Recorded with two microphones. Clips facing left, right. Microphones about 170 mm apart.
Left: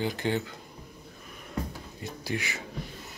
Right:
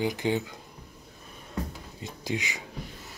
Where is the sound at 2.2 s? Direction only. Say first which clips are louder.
Right 2 dB; 15° right (ahead or behind).